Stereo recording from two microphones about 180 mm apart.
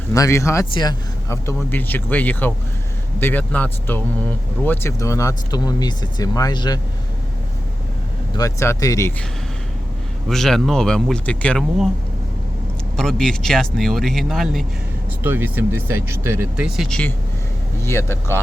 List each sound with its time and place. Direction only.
0.1 s speech: 15° left (ahead or behind)
8.4 s speech: 15° left (ahead or behind)
10.2 s speech: centre (ahead or behind)
13.0 s speech: 5° left (ahead or behind)
15.2 s speech: 10° right (ahead or behind)
17.8 s speech: 15° left (ahead or behind)